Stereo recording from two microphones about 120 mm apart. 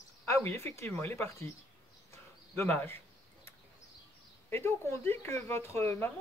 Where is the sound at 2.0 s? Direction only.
20° left (ahead or behind).